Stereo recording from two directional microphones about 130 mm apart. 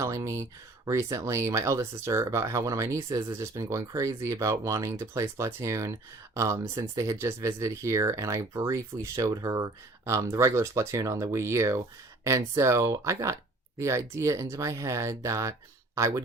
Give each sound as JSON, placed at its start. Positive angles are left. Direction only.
{"t": 0.0, "sound": "speech", "side_deg": -25}